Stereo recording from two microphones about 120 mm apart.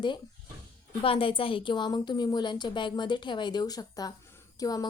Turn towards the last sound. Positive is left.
turn(degrees=30)  # may be behind; listen again after turning